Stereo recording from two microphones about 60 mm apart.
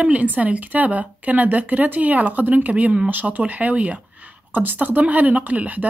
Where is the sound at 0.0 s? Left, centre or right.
Right.